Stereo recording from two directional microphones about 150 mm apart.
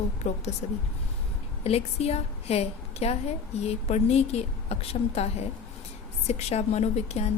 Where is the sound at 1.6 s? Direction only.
45° left (ahead or behind).